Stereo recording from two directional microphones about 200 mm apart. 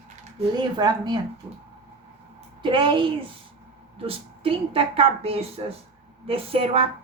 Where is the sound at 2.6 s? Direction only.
25° right (ahead or behind).